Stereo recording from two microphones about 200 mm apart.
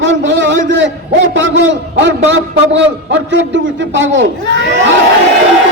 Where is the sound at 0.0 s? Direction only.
65° right (ahead or behind).